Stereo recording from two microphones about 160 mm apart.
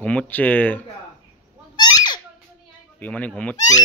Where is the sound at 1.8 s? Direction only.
25° left (ahead or behind).